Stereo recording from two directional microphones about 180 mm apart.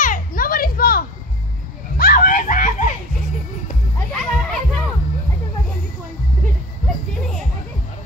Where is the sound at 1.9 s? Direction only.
55° left (ahead or behind).